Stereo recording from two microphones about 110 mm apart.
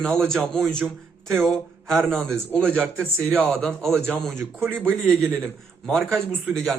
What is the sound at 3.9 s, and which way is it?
Speech, 20° right (ahead or behind).